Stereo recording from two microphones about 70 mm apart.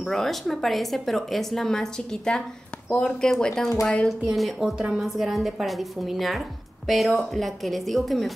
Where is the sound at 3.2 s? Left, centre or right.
Centre.